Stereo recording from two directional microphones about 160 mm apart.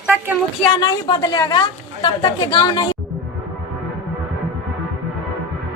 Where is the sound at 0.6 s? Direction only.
25° left (ahead or behind).